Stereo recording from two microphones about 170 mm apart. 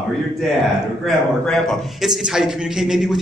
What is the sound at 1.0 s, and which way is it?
A man's voice, 5° left (ahead or behind).